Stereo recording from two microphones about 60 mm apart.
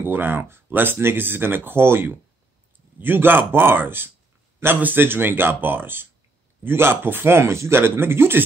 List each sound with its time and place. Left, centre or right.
0.0 s speech: right